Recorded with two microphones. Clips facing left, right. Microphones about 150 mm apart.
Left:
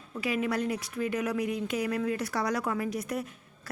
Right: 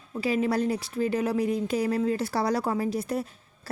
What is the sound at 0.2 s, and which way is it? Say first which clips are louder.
Speech: right 4 dB; 30° right (ahead or behind).